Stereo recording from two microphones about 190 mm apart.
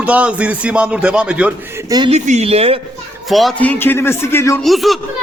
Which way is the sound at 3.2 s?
Centre (ahead or behind).